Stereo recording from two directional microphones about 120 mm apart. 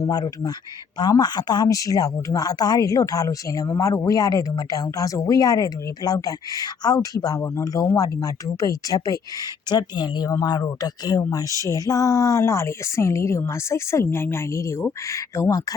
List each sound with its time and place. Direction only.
0.0 s a woman's voice: 30° left (ahead or behind)